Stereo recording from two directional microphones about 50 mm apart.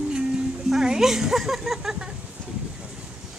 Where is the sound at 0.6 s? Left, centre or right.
Centre.